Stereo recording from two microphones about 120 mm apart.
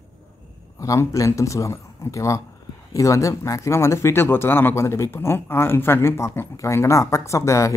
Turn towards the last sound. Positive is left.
turn(degrees=25)  # may be behind; listen again after turning